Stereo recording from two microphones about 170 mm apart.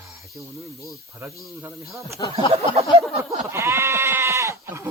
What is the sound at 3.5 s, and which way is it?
Goat, 15° right (ahead or behind).